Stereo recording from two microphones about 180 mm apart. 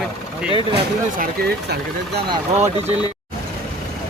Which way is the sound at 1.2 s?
65° right (ahead or behind).